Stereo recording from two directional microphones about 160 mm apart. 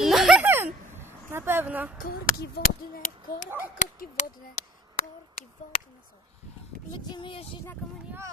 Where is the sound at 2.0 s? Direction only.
60° left (ahead or behind).